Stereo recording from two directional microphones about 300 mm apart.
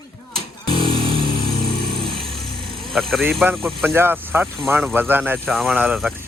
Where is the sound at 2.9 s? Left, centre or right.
Centre.